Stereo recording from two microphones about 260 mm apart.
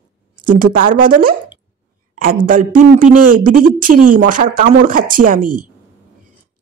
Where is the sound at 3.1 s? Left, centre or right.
Right.